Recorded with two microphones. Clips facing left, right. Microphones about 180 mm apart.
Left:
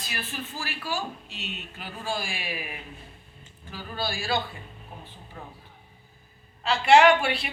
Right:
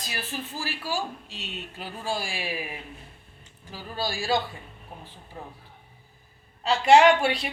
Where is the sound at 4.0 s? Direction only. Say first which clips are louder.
Right 1 dB; 35° right (ahead or behind).